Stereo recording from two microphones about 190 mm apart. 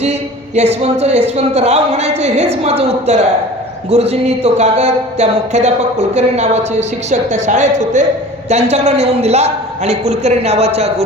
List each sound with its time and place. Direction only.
0.0 s speech: 35° right (ahead or behind)